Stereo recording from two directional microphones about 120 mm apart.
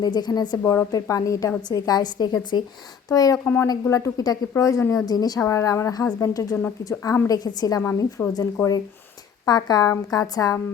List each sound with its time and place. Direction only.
0.0 s a woman's voice: 35° left (ahead or behind)
0.6 s a woman's voice: 20° left (ahead or behind)
3.4 s a woman's voice: 15° left (ahead or behind); by 7.8 s 35° left (ahead or behind)
7.8 s a woman's voice: 20° left (ahead or behind)